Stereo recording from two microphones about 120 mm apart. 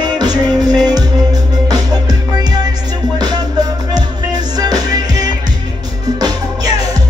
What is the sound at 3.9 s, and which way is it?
Music, 35° right (ahead or behind).